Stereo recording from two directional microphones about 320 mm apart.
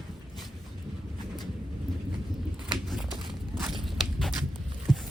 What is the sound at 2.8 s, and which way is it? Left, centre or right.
Walk, centre.